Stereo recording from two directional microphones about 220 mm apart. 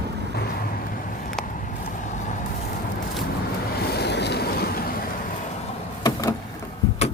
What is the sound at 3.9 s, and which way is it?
Train, 50° left (ahead or behind).